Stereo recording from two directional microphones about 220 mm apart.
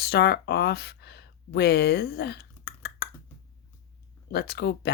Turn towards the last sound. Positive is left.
turn(degrees=50)  # may be behind; listen again after turning